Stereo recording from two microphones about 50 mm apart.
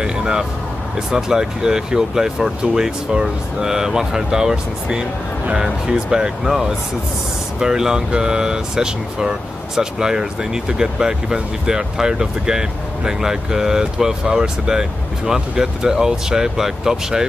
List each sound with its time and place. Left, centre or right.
0.0 s music: centre
0.9 s speech: centre
6.4 s speech: centre